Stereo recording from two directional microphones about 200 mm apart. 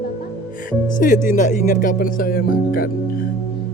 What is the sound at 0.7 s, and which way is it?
A woman's voice, 40° left (ahead or behind).